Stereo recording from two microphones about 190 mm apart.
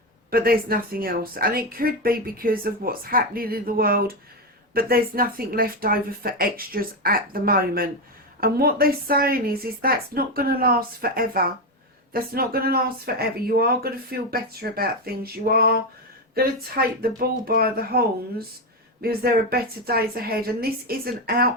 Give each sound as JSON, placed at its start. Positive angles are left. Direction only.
{"t": 0.3, "sound": "a woman's voice", "side_deg": -50}